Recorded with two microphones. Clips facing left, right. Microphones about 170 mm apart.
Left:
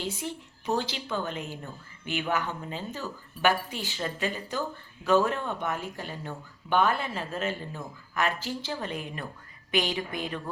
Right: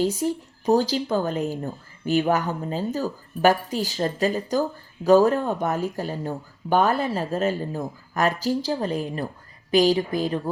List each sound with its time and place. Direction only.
0.0 s speech: 40° right (ahead or behind)